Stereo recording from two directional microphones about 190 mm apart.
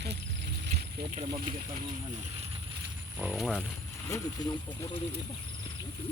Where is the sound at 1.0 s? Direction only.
35° right (ahead or behind).